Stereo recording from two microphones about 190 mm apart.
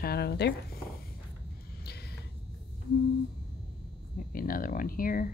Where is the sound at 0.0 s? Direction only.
55° left (ahead or behind).